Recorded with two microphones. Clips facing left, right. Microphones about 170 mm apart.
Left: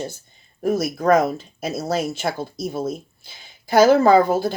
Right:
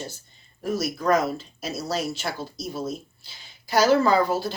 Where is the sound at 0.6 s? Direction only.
50° left (ahead or behind).